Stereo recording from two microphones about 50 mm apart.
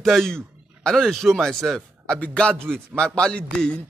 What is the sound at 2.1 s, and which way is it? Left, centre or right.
Speech, left.